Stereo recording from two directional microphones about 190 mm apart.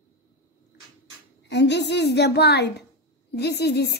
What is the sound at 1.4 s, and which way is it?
A child's voice, 65° left (ahead or behind).